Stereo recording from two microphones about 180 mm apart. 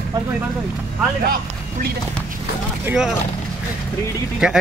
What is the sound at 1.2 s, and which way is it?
Speech, 55° right (ahead or behind).